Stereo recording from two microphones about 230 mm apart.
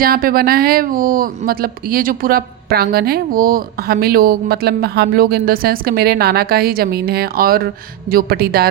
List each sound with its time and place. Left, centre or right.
0.0 s speech: right